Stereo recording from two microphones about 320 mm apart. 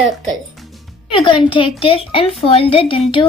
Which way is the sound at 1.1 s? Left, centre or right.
Centre.